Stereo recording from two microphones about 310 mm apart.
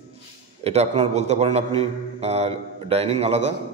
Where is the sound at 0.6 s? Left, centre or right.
Right.